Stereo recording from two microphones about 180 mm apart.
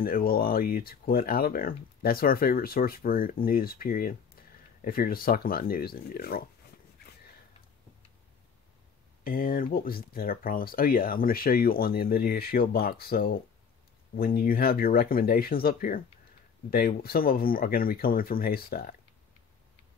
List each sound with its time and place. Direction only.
0.0 s speech: 55° left (ahead or behind)
9.2 s speech: 55° left (ahead or behind)